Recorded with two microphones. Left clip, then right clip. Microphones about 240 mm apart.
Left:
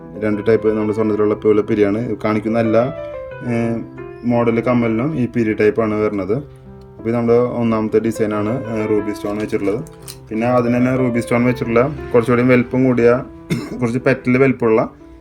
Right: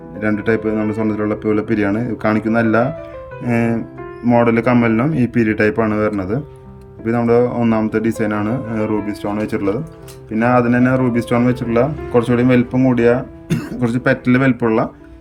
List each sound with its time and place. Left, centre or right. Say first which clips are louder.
0.2 s a man's voice: left 2 dB; centre
10.3 s speech: right 2 dB; centre